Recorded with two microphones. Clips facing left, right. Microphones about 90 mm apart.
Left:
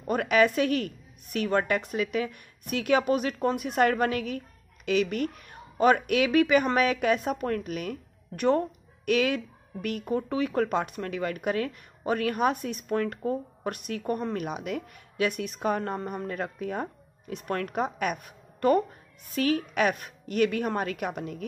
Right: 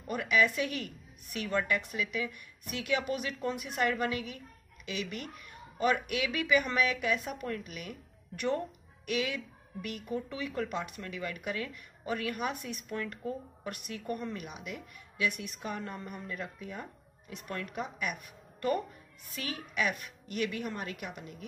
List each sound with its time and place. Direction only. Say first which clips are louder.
0.0 s a woman's voice: left 6 dB; 55° left (ahead or behind)
14.3 s a woman's voice: left 10 dB; 60° left (ahead or behind)